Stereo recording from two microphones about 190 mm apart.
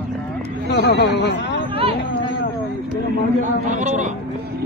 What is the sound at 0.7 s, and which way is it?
Speech, 65° left (ahead or behind).